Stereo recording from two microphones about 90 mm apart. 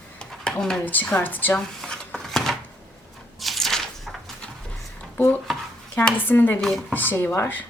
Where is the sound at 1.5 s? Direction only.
5° left (ahead or behind).